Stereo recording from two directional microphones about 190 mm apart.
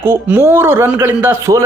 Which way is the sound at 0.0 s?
10° right (ahead or behind).